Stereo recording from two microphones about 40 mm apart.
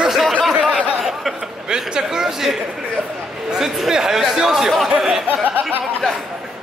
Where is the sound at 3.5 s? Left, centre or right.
Centre.